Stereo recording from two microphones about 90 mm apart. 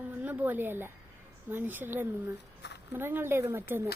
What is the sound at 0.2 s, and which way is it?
A woman's voice, 20° right (ahead or behind).